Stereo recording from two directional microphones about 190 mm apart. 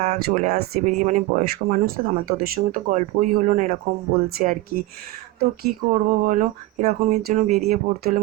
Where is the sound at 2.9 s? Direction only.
40° right (ahead or behind).